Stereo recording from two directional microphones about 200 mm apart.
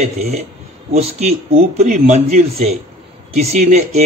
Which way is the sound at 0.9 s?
30° right (ahead or behind).